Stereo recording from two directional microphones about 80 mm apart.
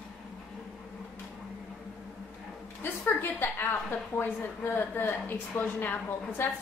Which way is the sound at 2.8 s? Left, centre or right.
Left.